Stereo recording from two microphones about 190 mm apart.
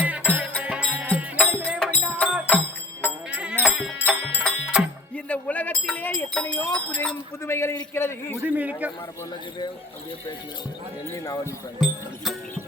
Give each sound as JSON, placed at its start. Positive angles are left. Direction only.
{"t": 0.0, "sound": "music", "side_deg": -5}
{"t": 3.6, "sound": "music", "side_deg": -5}
{"t": 5.1, "sound": "a sound", "side_deg": 5}
{"t": 7.4, "sound": "a man's voice", "side_deg": 15}
{"t": 8.4, "sound": "a man's voice", "side_deg": -10}
{"t": 11.1, "sound": "a man's voice", "side_deg": 15}
{"t": 11.8, "sound": "speech", "side_deg": 0}